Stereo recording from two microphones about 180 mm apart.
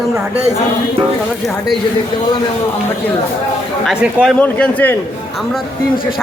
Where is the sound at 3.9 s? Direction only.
Centre (ahead or behind).